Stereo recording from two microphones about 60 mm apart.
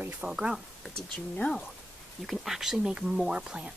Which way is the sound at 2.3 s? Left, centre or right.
Centre.